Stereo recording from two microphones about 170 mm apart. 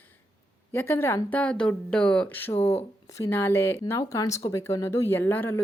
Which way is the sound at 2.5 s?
35° left (ahead or behind).